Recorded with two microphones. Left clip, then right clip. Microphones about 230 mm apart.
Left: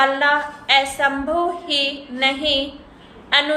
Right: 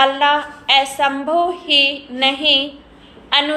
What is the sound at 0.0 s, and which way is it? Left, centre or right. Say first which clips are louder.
A woman's voice: right 2 dB; centre.